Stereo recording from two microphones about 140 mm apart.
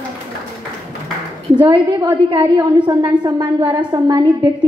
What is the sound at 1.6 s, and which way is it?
A woman's voice, 35° right (ahead or behind).